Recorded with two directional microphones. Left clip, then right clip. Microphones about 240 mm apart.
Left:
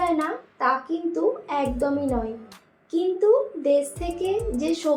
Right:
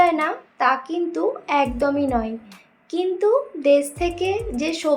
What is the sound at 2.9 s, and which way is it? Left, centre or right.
A woman's voice, right.